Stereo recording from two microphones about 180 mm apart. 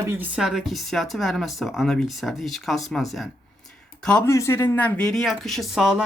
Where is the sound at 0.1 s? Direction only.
5° right (ahead or behind).